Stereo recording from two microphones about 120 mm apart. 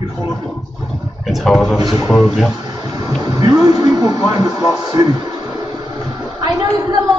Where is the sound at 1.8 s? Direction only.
35° right (ahead or behind).